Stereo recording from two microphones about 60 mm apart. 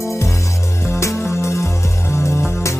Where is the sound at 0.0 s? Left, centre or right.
Left.